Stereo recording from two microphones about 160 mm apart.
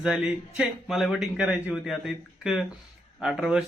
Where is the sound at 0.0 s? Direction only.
5° right (ahead or behind).